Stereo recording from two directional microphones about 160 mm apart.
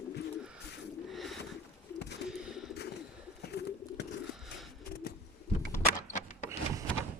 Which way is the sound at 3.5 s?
90° left.